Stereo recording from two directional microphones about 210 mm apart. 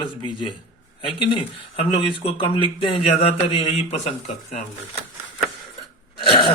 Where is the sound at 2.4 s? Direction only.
25° left (ahead or behind).